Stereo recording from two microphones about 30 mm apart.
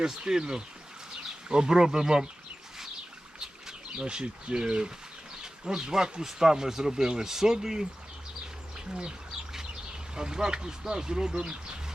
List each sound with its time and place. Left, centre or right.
0.0 s speech: right
3.4 s speech: right
10.2 s speech: right